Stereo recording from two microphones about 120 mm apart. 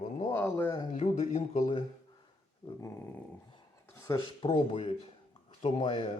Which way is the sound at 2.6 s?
45° left (ahead or behind).